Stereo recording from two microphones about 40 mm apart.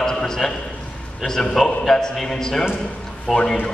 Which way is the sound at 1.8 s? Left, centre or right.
Centre.